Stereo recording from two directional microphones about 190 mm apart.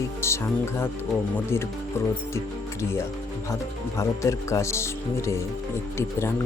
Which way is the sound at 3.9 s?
15° left (ahead or behind).